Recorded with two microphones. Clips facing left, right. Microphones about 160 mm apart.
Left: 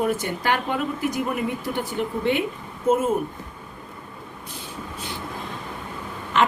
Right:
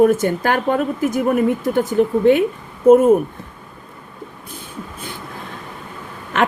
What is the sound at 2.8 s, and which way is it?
Speech, 55° right (ahead or behind).